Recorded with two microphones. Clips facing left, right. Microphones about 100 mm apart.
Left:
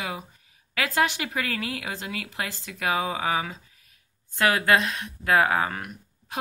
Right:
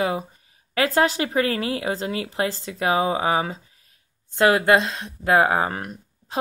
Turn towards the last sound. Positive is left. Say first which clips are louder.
# right 6 dB
turn(degrees=-35)  # may be behind; listen again after turning